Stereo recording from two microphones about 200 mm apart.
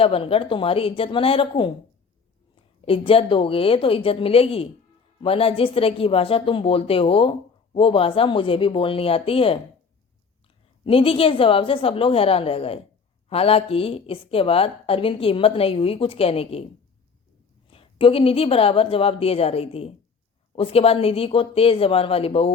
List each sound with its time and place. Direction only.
0.0 s speech: 30° left (ahead or behind)
2.8 s speech: 25° left (ahead or behind)
10.8 s speech: 25° left (ahead or behind)
17.7 s speech: 25° left (ahead or behind)